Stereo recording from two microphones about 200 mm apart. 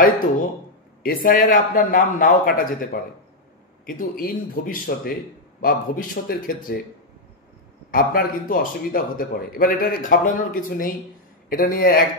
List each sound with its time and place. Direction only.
1.0 s a man's voice: 45° left (ahead or behind)
7.9 s a man's voice: 45° left (ahead or behind)